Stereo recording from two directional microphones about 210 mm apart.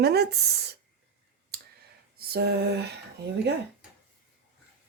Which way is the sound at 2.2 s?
50° right (ahead or behind).